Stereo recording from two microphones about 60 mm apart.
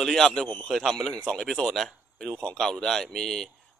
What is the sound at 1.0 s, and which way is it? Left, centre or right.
Speech, centre.